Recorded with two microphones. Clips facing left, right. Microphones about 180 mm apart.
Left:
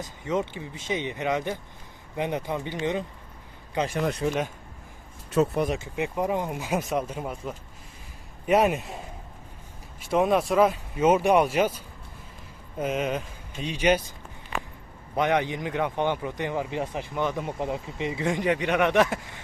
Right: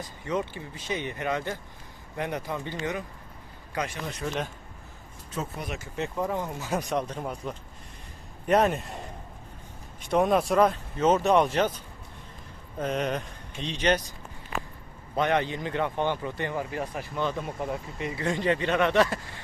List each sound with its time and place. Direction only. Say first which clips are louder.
0.0 s speech: left 2 dB; 20° left (ahead or behind)
4.3 s speech: left 4 dB; 10° left (ahead or behind)
5.3 s speech: left 12 dB; 70° left (ahead or behind)
5.8 s speech: left 3 dB; 15° left (ahead or behind)
6.7 s speech: left 1 dB; 5° left (ahead or behind)
10.0 s speech: left 1 dB; 5° left (ahead or behind)
12.8 s speech: left 1 dB; 5° left (ahead or behind)
15.1 s speech: left 1 dB; 15° left (ahead or behind)